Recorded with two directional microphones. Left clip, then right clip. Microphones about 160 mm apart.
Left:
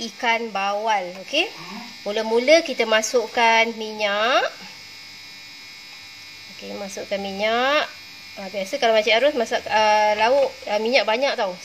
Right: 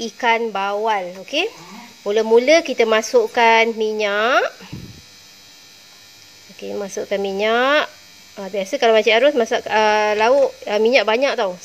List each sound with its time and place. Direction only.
0.0 s a woman's voice: 60° right (ahead or behind)
6.6 s a woman's voice: 55° right (ahead or behind)